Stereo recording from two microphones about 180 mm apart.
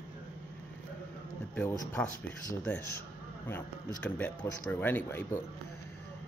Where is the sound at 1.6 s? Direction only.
10° left (ahead or behind).